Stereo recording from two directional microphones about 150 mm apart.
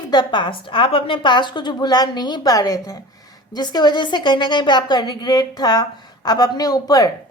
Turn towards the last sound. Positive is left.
turn(degrees=25)  # may be behind; listen again after turning